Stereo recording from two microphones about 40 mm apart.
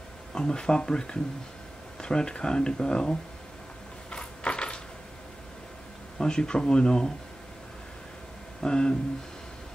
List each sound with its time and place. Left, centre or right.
0.3 s speech: left
4.1 s coin: left
6.1 s speech: centre
8.6 s speech: centre